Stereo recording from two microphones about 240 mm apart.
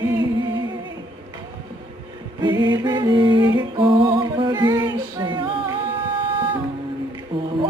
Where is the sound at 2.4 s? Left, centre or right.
Centre.